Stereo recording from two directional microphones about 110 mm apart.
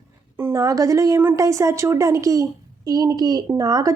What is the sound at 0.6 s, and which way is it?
A woman's voice, 30° right (ahead or behind).